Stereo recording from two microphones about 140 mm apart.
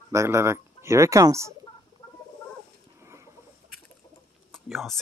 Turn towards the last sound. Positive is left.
turn(degrees=0)  # may be behind; listen again after turning